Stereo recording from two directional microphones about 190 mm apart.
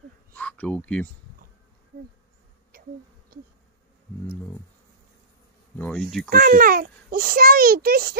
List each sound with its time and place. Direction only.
0.3 s a sound: 10° left (ahead or behind)
5.8 s speech: 5° left (ahead or behind)
6.3 s a child's voice: 50° right (ahead or behind)